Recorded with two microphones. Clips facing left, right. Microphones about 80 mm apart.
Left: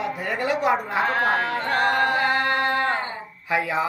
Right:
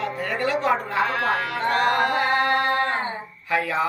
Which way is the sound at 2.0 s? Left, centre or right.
Right.